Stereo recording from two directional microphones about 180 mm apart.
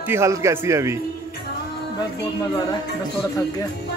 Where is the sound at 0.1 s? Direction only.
15° right (ahead or behind).